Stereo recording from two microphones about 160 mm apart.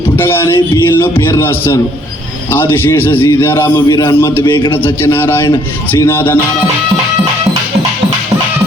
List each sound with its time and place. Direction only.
0.2 s a man's voice: 15° left (ahead or behind)